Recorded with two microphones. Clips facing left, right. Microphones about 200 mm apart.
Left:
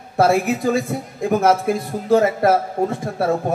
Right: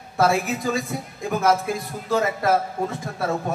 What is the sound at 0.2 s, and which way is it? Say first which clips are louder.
A man's voice: left 5 dB; 55° left (ahead or behind).